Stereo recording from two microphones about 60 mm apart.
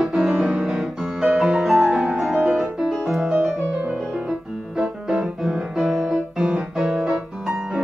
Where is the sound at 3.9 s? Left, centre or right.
Centre.